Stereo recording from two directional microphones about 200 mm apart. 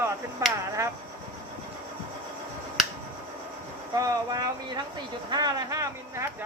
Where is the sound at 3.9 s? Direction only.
20° right (ahead or behind).